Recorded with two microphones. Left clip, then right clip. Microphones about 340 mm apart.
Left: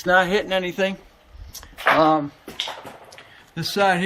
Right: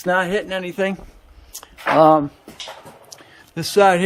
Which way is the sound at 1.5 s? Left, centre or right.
Right.